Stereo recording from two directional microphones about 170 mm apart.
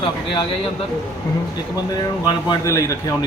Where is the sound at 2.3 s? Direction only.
20° left (ahead or behind).